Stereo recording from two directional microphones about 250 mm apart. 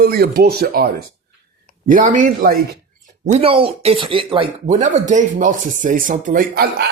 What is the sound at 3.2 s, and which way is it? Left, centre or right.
Speech, right.